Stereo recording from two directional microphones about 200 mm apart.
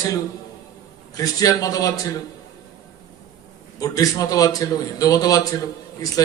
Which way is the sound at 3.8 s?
15° left (ahead or behind).